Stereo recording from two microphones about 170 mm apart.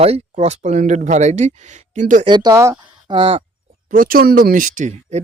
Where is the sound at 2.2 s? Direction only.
25° right (ahead or behind).